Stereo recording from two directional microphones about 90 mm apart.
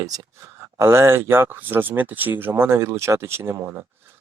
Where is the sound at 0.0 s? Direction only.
45° right (ahead or behind).